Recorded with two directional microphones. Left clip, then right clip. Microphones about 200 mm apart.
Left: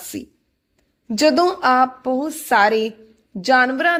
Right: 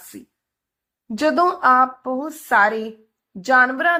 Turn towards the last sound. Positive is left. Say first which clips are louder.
# even
turn(degrees=30)  # may be behind; listen again after turning